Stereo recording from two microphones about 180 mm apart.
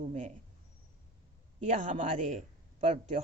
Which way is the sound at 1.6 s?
40° right (ahead or behind).